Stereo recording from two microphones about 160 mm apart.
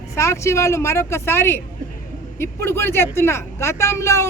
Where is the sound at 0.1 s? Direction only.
20° left (ahead or behind).